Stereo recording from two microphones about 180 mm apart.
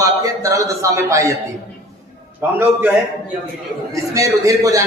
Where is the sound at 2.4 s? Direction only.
10° right (ahead or behind).